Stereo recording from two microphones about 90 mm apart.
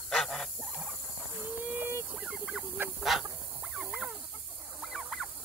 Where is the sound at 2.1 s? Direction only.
10° right (ahead or behind).